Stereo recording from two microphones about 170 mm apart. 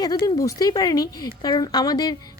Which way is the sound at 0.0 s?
25° left (ahead or behind).